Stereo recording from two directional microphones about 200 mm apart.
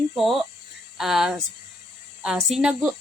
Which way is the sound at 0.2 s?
Centre (ahead or behind).